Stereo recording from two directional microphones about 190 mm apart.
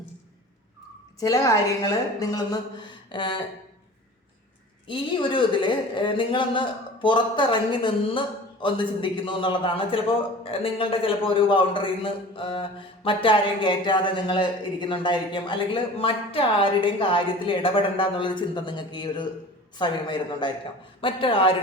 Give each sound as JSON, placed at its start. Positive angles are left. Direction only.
{"t": 1.2, "sound": "speech", "side_deg": 20}
{"t": 4.9, "sound": "speech", "side_deg": 25}